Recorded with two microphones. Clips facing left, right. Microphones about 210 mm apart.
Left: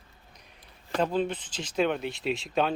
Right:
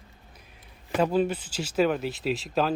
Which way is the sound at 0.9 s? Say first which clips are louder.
Right 3 dB; 10° right (ahead or behind).